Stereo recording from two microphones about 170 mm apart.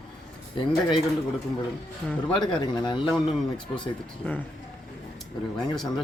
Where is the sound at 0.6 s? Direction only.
30° left (ahead or behind).